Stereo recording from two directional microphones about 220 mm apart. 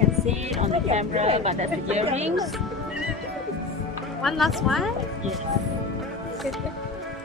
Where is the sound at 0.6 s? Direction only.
30° right (ahead or behind).